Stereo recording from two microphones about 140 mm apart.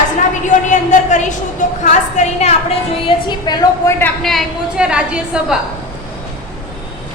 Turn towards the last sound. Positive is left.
turn(degrees=-5)  # may be behind; listen again after turning